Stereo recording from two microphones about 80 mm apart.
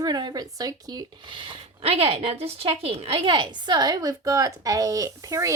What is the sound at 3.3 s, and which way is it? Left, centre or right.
A woman's voice, right.